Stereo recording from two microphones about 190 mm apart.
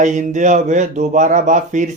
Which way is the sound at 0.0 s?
40° right (ahead or behind).